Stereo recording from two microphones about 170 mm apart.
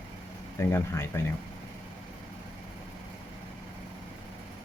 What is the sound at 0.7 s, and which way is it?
Speech, 15° left (ahead or behind).